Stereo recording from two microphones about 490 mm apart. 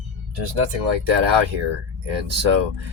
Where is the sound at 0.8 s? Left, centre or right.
Right.